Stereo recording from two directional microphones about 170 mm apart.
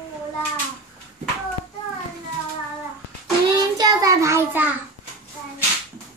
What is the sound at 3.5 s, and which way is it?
Child singing, 25° right (ahead or behind).